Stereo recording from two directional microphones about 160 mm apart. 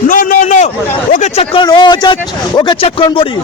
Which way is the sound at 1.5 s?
30° left (ahead or behind).